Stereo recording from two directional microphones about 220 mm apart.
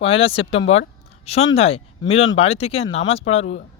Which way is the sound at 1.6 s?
25° left (ahead or behind).